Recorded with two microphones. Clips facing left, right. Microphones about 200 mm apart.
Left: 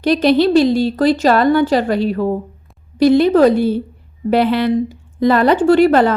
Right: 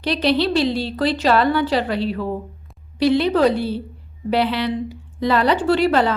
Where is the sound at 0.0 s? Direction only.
45° left (ahead or behind).